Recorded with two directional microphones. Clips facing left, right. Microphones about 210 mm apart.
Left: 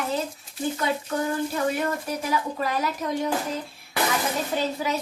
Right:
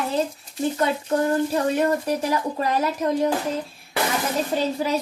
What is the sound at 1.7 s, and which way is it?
Speech, 35° right (ahead or behind).